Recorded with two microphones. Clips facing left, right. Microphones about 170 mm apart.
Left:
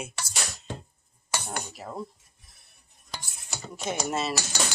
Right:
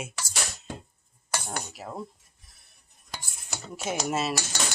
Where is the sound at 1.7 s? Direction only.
Centre (ahead or behind).